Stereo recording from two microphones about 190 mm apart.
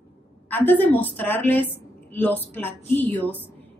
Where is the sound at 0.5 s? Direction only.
10° left (ahead or behind).